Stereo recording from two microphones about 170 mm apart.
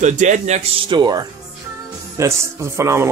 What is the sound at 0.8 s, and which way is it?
Speech, 25° right (ahead or behind).